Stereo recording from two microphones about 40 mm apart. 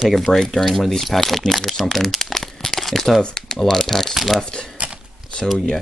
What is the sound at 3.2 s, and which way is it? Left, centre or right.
Speech, centre.